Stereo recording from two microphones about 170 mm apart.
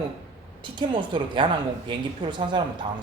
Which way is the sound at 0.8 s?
30° right (ahead or behind).